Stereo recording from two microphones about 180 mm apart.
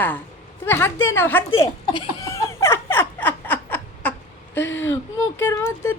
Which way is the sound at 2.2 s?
15° left (ahead or behind).